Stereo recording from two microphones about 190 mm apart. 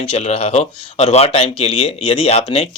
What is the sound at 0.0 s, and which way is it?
Speech, 35° left (ahead or behind).